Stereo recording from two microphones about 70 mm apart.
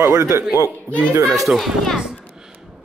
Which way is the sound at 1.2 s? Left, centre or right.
Centre.